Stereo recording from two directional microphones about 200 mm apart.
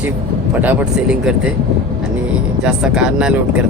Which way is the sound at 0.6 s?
5° right (ahead or behind).